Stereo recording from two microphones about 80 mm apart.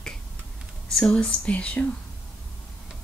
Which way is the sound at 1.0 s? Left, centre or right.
Centre.